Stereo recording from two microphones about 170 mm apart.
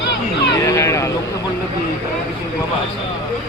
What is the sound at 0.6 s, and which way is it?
Cat, 15° left (ahead or behind).